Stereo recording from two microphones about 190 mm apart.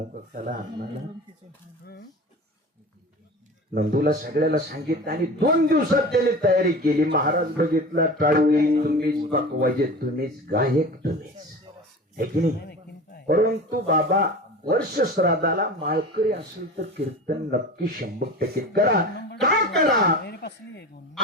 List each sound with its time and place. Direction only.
0.3 s a man's voice: 45° right (ahead or behind)
3.8 s a man's voice: 50° right (ahead or behind)
12.1 s a man's voice: 55° right (ahead or behind)
20.2 s speech: 60° left (ahead or behind)